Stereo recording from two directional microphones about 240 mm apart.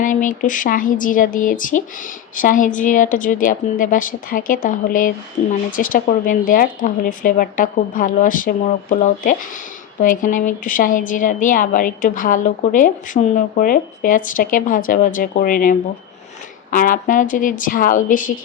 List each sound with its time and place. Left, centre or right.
0.0 s a woman's voice: left